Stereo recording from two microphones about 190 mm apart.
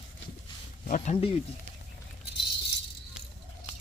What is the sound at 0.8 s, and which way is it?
Speech, 40° left (ahead or behind).